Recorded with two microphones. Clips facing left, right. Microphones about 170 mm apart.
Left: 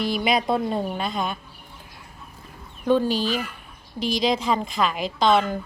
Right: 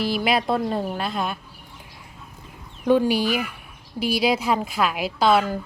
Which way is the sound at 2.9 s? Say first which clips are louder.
Right 2 dB; 10° right (ahead or behind).